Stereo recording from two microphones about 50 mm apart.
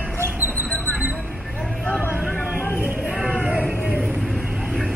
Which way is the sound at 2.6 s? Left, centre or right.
Left.